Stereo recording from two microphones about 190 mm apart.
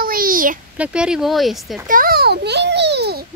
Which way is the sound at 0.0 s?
50° right (ahead or behind).